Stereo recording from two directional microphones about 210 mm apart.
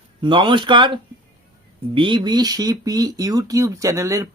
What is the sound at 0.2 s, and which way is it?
Speech, 25° right (ahead or behind).